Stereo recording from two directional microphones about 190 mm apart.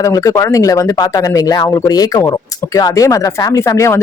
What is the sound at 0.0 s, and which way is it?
Speech, 15° left (ahead or behind).